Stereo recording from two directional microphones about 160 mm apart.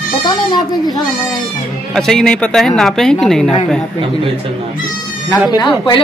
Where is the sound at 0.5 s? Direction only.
25° left (ahead or behind).